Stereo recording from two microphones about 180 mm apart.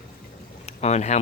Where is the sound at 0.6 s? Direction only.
35° left (ahead or behind).